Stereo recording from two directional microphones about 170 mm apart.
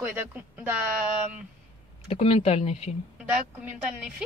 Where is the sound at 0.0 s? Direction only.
10° right (ahead or behind).